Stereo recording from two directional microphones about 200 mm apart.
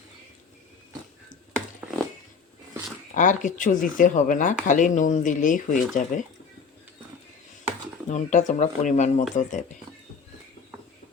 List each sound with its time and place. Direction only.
1.8 s a sound: 5° right (ahead or behind)
3.2 s speech: 40° left (ahead or behind)
8.1 s speech: 35° left (ahead or behind)